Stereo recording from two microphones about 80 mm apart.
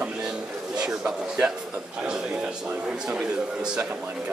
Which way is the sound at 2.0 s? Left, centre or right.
Centre.